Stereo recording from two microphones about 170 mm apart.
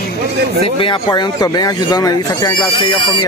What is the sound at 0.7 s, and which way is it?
Speech, 30° left (ahead or behind).